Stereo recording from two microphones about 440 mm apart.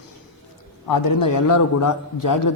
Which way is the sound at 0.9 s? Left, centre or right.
Left.